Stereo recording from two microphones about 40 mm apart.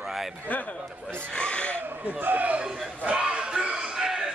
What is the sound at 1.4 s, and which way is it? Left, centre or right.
Speech, left.